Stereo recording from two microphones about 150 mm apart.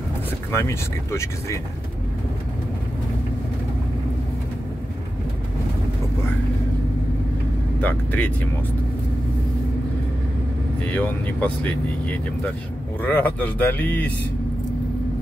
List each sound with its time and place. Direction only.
0.5 s speech: 15° left (ahead or behind)
7.8 s speech: 10° left (ahead or behind)
10.9 s speech: 10° left (ahead or behind)